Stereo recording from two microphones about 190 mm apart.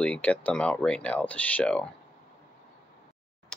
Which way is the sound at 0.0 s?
5° left (ahead or behind).